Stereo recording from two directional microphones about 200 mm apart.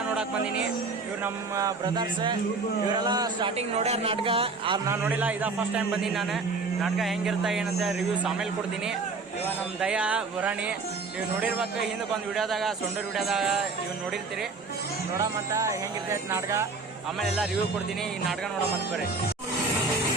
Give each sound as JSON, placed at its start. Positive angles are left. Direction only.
{"t": 1.2, "sound": "a man's voice", "side_deg": -15}
{"t": 3.8, "sound": "a man's voice", "side_deg": -30}
{"t": 4.9, "sound": "a man's voice", "side_deg": -10}
{"t": 9.8, "sound": "speech", "side_deg": -5}
{"t": 15.2, "sound": "a man's voice", "side_deg": -15}
{"t": 17.2, "sound": "speech", "side_deg": 0}